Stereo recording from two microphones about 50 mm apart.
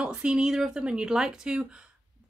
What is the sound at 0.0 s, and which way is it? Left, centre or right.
A woman's voice, centre.